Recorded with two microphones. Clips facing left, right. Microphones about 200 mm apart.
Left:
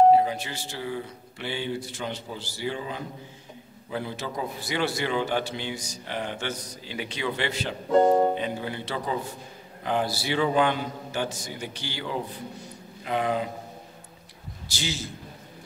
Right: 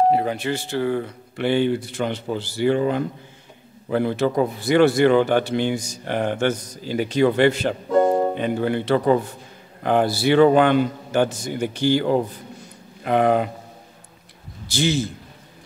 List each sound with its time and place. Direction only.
0.1 s speech: 60° right (ahead or behind)
13.0 s speech: 60° right (ahead or behind)
14.7 s speech: 55° right (ahead or behind)